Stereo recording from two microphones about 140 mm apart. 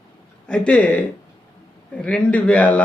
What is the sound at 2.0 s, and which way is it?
Speech, 10° left (ahead or behind).